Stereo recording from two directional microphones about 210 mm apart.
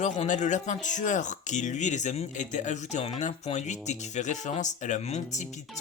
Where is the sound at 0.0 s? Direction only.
35° left (ahead or behind).